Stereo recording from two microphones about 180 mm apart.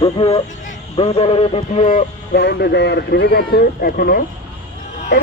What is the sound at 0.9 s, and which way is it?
Speech, 30° left (ahead or behind).